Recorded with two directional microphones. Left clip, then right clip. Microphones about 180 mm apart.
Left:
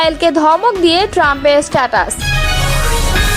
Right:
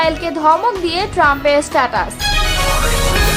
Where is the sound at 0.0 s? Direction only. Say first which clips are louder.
Left 3 dB; 40° left (ahead or behind).